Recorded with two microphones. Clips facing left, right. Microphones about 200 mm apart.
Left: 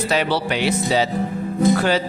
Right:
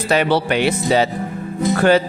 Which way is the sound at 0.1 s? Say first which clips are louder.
Right 6 dB; 55° right (ahead or behind).